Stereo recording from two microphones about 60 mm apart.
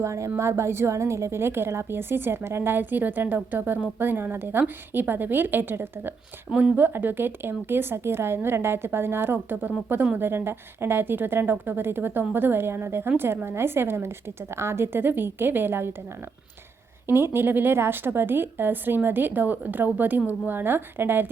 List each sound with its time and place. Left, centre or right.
0.0 s a woman's voice: right
17.1 s a woman's voice: right